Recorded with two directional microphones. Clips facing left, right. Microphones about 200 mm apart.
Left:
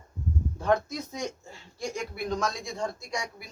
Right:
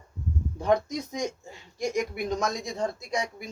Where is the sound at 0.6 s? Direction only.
15° right (ahead or behind).